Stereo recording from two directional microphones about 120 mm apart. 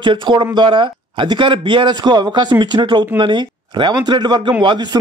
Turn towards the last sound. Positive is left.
turn(degrees=-40)  # may be behind; listen again after turning